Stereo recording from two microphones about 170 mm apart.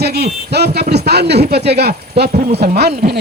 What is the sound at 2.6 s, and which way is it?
Speech, 75° right (ahead or behind).